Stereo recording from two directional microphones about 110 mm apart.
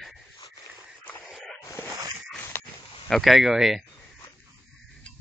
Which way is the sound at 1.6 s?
25° left (ahead or behind).